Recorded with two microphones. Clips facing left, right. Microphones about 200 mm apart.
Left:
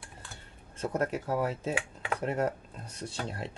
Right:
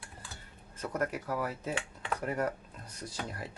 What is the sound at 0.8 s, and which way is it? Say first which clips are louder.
Speech: left 3 dB; 25° left (ahead or behind).